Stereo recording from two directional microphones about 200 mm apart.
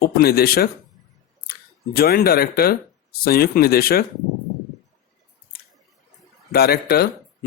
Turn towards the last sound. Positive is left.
turn(degrees=50)  # may be behind; listen again after turning